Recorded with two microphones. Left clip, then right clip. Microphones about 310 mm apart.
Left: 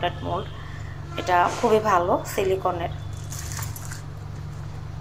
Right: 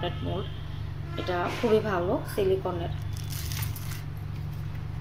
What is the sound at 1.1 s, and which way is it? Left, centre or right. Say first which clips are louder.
A woman's voice: left 9 dB; left.